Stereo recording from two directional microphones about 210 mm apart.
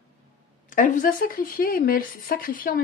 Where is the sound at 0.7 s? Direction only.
40° left (ahead or behind).